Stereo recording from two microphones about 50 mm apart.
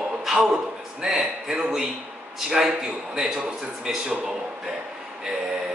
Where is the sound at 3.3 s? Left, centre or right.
Centre.